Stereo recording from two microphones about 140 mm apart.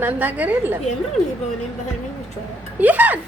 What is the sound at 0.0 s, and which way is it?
Speech, 15° right (ahead or behind).